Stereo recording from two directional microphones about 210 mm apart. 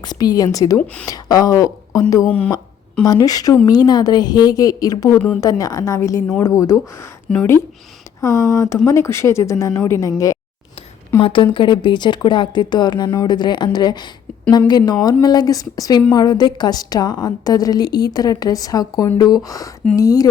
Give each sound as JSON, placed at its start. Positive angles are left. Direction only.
{"t": 0.0, "sound": "a woman's voice", "side_deg": 20}
{"t": 2.2, "sound": "speech", "side_deg": 5}
{"t": 3.0, "sound": "a woman's voice", "side_deg": 15}